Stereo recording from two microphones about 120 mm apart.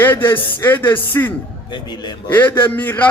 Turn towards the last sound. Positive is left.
turn(degrees=15)  # may be behind; listen again after turning